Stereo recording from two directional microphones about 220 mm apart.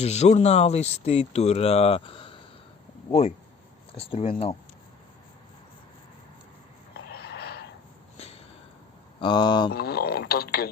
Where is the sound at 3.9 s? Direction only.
25° left (ahead or behind).